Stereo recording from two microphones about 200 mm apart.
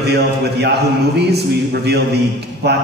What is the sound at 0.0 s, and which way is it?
A man's voice, 55° right (ahead or behind).